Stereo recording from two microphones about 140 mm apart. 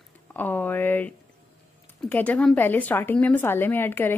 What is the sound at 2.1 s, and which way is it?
Speech, 10° left (ahead or behind).